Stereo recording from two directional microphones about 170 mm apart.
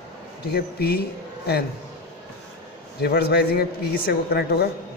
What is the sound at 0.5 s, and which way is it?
Speech, 70° left (ahead or behind).